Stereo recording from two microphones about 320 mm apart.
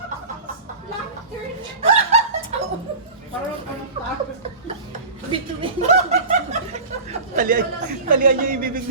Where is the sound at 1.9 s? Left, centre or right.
Centre.